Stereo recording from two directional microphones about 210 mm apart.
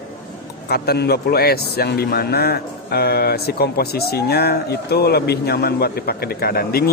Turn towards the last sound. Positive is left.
turn(degrees=45)  # may be behind; listen again after turning